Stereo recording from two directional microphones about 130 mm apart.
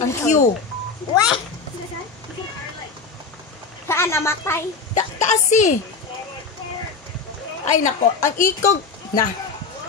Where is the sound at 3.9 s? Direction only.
20° left (ahead or behind).